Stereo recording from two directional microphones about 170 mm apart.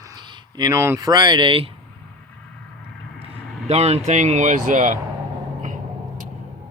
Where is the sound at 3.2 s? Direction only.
35° right (ahead or behind).